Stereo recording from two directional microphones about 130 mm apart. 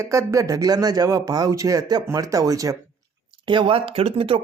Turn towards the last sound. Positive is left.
turn(degrees=-45)  # may be behind; listen again after turning